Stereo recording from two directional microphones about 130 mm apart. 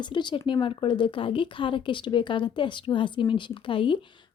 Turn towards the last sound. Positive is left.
turn(degrees=40)  # may be behind; listen again after turning